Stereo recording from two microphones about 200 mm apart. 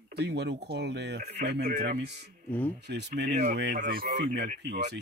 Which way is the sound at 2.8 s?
60° right (ahead or behind).